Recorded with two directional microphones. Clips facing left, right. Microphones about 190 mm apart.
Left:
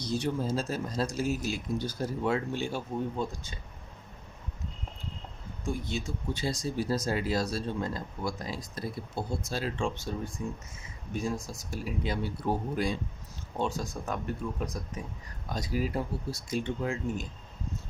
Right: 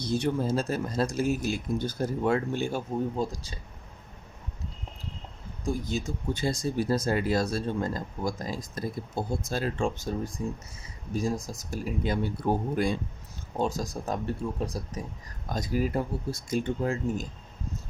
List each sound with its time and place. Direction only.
0.0 s speech: 55° right (ahead or behind); by 3.6 s 35° right (ahead or behind)
5.6 s speech: 40° right (ahead or behind)
13.6 s speech: 40° right (ahead or behind)
15.4 s speech: 45° right (ahead or behind)